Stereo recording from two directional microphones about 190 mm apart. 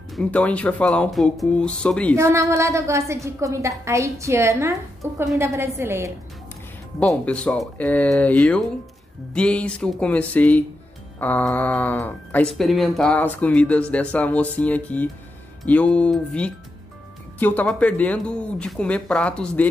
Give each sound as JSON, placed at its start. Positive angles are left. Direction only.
{"t": 0.1, "sound": "speech", "side_deg": 5}
{"t": 2.1, "sound": "a woman's voice", "side_deg": -15}
{"t": 7.0, "sound": "speech", "side_deg": 5}